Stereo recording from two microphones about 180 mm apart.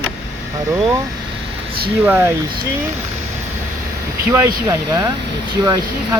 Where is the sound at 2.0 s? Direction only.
10° right (ahead or behind).